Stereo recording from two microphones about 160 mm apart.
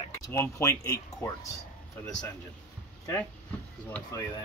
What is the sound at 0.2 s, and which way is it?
Speech, 15° left (ahead or behind).